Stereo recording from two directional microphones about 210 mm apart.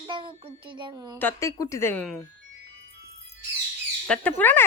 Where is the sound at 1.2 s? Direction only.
10° left (ahead or behind).